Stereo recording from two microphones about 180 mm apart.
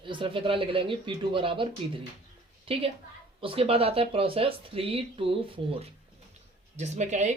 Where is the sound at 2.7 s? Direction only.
30° right (ahead or behind).